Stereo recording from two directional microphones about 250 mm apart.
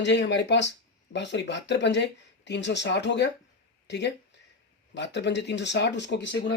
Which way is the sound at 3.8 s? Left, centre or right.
Left.